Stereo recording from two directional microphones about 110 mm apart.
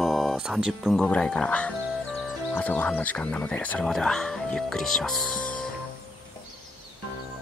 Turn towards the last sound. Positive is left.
turn(degrees=5)  # may be behind; listen again after turning